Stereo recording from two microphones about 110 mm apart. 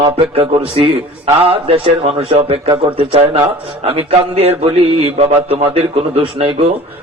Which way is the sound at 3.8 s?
70° right (ahead or behind).